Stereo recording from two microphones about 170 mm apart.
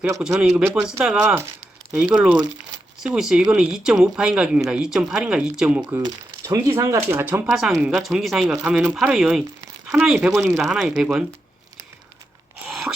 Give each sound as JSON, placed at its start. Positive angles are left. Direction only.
{"t": 0.3, "sound": "speech", "side_deg": -5}
{"t": 5.8, "sound": "speech", "side_deg": -20}
{"t": 9.8, "sound": "crumpling", "side_deg": -15}
{"t": 10.1, "sound": "speech", "side_deg": -5}
{"t": 10.4, "sound": "speech", "side_deg": -15}
{"t": 10.7, "sound": "speech", "side_deg": 0}
{"t": 12.6, "sound": "wail", "side_deg": 0}